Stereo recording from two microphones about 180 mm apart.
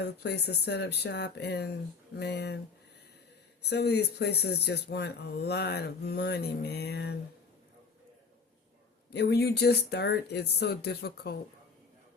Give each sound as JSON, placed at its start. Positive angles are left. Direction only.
{"t": 0.0, "sound": "speech", "side_deg": 65}
{"t": 3.7, "sound": "speech", "side_deg": 65}
{"t": 9.1, "sound": "speech", "side_deg": 65}